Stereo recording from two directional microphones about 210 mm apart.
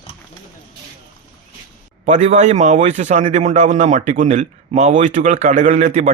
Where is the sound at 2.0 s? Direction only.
35° right (ahead or behind).